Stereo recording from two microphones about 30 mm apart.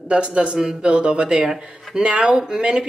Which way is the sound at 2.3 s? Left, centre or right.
Right.